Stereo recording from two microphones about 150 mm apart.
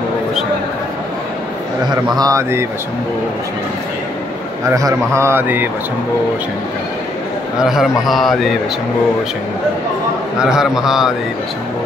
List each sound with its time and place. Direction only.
2.1 s a man's voice: 20° right (ahead or behind)
4.6 s a man's voice: 20° right (ahead or behind)
7.5 s a man's voice: 5° right (ahead or behind)
10.4 s a man's voice: 5° right (ahead or behind)